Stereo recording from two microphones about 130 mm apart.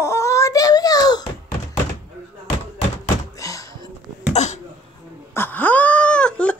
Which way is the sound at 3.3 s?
25° left (ahead or behind).